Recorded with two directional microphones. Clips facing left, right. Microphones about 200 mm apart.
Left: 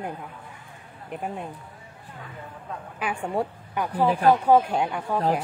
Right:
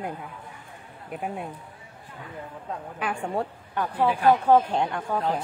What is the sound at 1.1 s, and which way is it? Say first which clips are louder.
Speech: even; 5° right (ahead or behind).